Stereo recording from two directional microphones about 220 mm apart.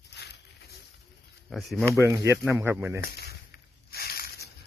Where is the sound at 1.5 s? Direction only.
Centre (ahead or behind).